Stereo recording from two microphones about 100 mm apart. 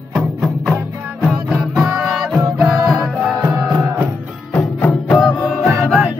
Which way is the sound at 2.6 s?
Centre (ahead or behind).